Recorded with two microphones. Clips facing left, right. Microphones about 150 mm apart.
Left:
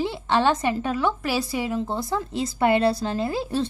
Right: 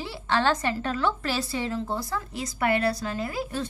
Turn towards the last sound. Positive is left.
turn(degrees=25)  # may be behind; listen again after turning